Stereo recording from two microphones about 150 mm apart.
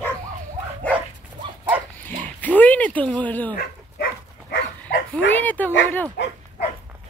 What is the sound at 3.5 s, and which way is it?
Dog, 80° left.